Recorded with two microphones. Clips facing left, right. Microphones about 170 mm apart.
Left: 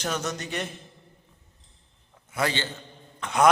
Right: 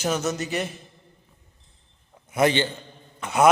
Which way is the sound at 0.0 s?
5° right (ahead or behind).